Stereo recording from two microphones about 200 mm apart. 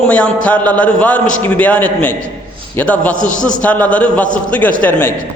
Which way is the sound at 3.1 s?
40° left (ahead or behind).